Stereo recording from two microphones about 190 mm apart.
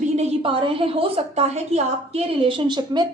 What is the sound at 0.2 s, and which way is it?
A woman's voice, 30° right (ahead or behind).